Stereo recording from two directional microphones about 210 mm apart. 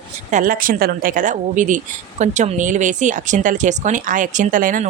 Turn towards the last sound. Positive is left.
turn(degrees=-40)  # may be behind; listen again after turning